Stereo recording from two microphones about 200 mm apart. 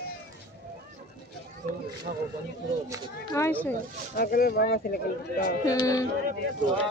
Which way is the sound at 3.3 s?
10° left (ahead or behind).